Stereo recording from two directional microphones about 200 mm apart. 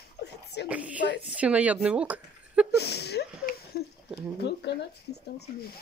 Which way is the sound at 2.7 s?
55° left (ahead or behind).